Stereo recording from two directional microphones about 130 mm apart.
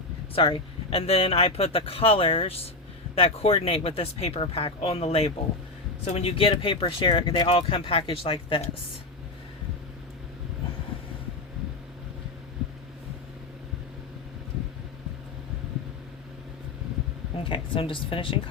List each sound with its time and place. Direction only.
0.3 s speech: 45° left (ahead or behind)
17.3 s a woman's voice: 40° left (ahead or behind)